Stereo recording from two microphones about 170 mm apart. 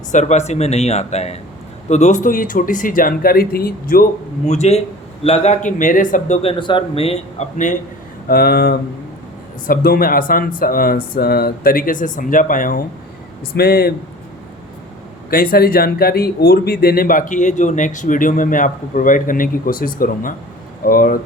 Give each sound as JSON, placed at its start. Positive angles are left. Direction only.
{"t": 0.1, "sound": "speech", "side_deg": 45}
{"t": 4.4, "sound": "speech", "side_deg": 40}
{"t": 8.3, "sound": "speech", "side_deg": 65}
{"t": 13.6, "sound": "speech", "side_deg": 65}
{"t": 15.3, "sound": "speech", "side_deg": 60}